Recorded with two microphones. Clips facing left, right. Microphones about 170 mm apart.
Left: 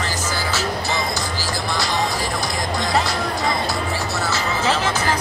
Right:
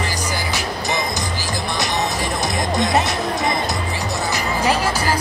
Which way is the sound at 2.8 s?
20° right (ahead or behind).